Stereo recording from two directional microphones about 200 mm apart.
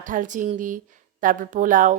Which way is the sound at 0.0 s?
40° right (ahead or behind).